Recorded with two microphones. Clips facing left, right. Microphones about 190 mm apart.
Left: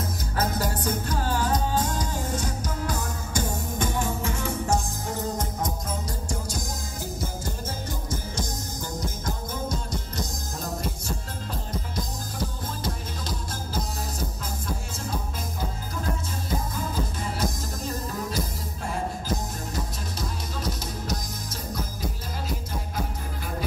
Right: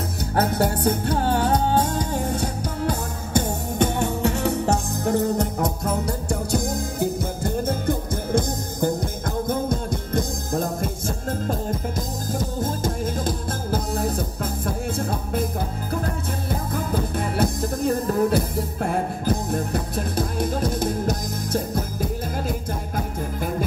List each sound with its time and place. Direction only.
0.3 s music: 60° right (ahead or behind)
16.4 s music: 60° right (ahead or behind)